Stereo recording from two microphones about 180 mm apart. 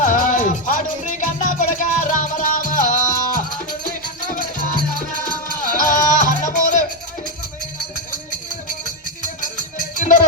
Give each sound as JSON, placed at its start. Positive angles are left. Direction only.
{"t": 0.0, "sound": "music", "side_deg": 50}
{"t": 9.2, "sound": "music", "side_deg": 45}